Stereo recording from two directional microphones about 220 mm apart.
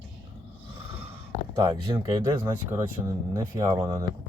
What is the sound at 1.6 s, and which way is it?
Speech, 20° right (ahead or behind).